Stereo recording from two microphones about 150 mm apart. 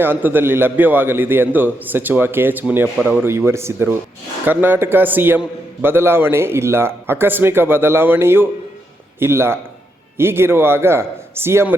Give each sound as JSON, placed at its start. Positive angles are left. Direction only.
{"t": 0.0, "sound": "a man's voice", "side_deg": -15}